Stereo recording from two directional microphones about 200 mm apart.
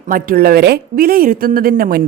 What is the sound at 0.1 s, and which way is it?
A woman's voice, 45° right (ahead or behind).